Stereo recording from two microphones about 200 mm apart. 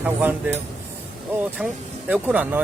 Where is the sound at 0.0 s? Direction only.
10° right (ahead or behind).